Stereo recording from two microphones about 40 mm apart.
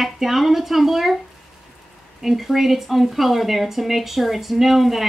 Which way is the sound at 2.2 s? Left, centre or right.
Centre.